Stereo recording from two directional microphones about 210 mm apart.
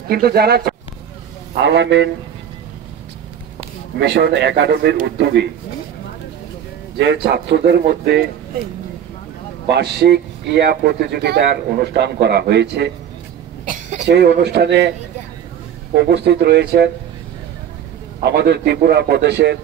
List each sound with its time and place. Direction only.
0.1 s speech: 50° right (ahead or behind)
4.0 s speech: 55° right (ahead or behind)
7.0 s speech: 50° right (ahead or behind)
9.7 s speech: 50° right (ahead or behind)
13.7 s cough: 35° right (ahead or behind)
14.0 s speech: 50° right (ahead or behind)
15.9 s speech: 55° right (ahead or behind)
18.2 s speech: 50° right (ahead or behind)